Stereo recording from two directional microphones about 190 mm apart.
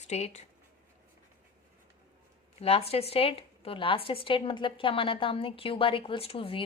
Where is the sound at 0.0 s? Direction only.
35° left (ahead or behind).